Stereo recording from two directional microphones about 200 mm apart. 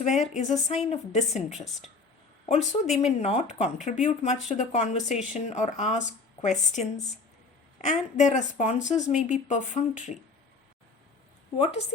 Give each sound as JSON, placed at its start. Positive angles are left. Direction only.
{"t": 0.0, "sound": "speech", "side_deg": 35}
{"t": 1.5, "sound": "a woman's voice", "side_deg": 0}
{"t": 2.5, "sound": "speech", "side_deg": 35}
{"t": 11.5, "sound": "speech", "side_deg": 30}